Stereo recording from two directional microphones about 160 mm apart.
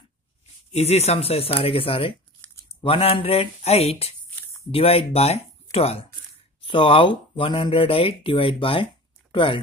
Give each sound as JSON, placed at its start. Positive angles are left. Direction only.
{"t": 0.7, "sound": "speech", "side_deg": 40}